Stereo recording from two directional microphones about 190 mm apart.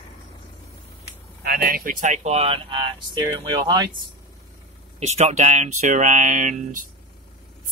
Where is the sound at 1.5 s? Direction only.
55° right (ahead or behind); by 3.9 s 20° right (ahead or behind).